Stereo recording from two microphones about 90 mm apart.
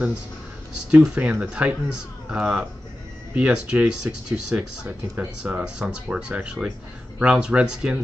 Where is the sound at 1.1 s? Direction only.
15° right (ahead or behind).